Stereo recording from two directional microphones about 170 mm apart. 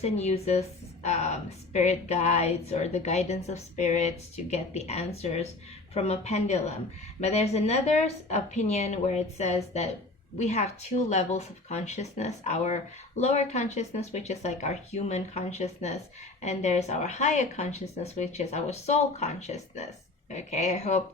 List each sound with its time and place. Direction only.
0.0 s speech: 40° left (ahead or behind)
10.3 s speech: 40° left (ahead or behind)